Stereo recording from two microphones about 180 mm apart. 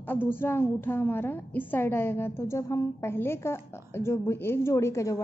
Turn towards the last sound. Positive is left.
turn(degrees=15)  # may be behind; listen again after turning